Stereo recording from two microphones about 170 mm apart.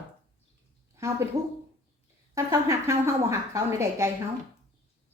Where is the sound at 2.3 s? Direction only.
20° right (ahead or behind).